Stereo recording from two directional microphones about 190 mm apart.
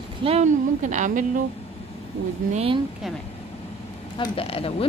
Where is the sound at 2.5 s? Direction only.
30° right (ahead or behind).